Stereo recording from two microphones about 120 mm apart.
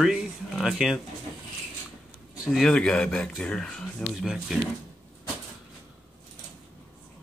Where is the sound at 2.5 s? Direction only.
5° left (ahead or behind).